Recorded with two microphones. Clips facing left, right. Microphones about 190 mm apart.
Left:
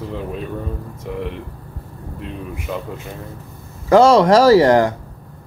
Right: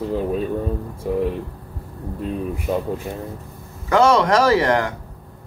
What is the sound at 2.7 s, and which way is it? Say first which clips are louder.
Speech: right 4 dB; 30° right (ahead or behind).